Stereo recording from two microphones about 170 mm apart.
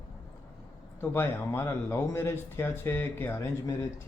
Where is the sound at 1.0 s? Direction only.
15° left (ahead or behind).